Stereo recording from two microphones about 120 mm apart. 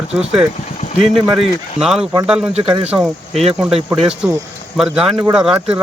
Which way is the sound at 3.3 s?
60° right (ahead or behind).